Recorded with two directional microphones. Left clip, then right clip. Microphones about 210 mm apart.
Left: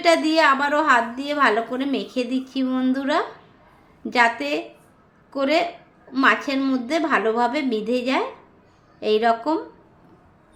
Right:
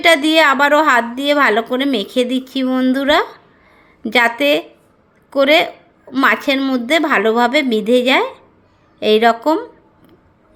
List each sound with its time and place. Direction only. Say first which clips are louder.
0.0 s a woman's voice: right 6 dB; 40° right (ahead or behind)